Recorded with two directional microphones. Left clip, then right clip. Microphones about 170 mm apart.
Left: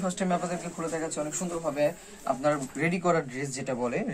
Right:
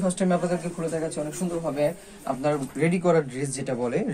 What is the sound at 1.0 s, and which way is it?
Speech, centre (ahead or behind).